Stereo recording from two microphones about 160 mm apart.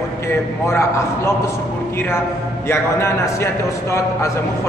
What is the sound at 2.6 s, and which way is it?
Speech, 15° left (ahead or behind).